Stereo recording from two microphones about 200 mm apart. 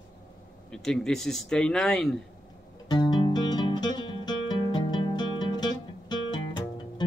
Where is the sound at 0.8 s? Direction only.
5° left (ahead or behind).